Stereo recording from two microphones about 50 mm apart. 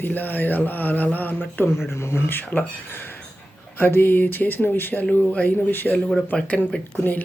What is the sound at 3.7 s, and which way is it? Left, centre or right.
Speech, left.